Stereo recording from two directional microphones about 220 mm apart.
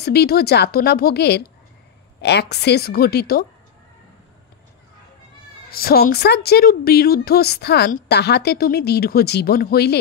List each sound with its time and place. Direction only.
0.0 s a woman's voice: 45° left (ahead or behind)
5.7 s a woman's voice: 45° left (ahead or behind)